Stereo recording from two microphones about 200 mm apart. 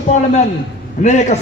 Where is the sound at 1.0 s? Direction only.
35° left (ahead or behind).